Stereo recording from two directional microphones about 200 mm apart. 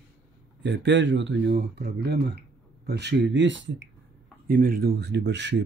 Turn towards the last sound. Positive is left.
turn(degrees=-60)  # may be behind; listen again after turning